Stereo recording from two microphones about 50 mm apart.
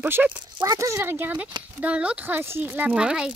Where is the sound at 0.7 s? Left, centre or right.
Right.